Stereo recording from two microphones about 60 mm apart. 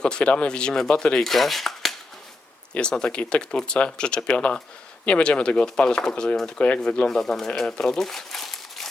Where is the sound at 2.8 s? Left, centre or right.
Centre.